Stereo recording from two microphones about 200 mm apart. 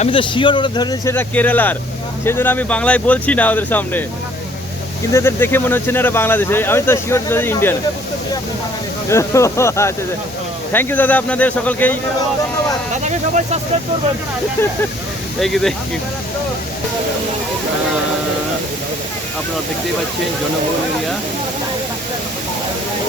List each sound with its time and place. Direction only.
0.0 s speech: 25° left (ahead or behind); by 4.0 s 10° left (ahead or behind)
5.1 s speech: 10° left (ahead or behind)
9.0 s speech: 15° left (ahead or behind)
13.1 s speech: 35° right (ahead or behind)
15.4 s speech: centre (ahead or behind)